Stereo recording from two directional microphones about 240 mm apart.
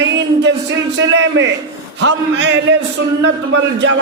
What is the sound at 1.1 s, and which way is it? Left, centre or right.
A man's voice, right.